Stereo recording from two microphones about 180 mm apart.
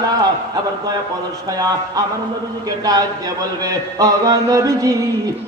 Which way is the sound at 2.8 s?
20° right (ahead or behind).